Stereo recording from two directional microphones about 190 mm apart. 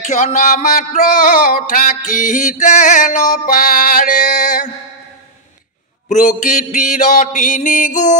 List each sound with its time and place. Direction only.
0.0 s music: 40° left (ahead or behind)
6.0 s mantra: 40° left (ahead or behind)